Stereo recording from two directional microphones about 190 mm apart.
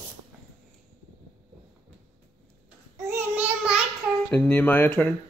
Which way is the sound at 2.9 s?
10° right (ahead or behind).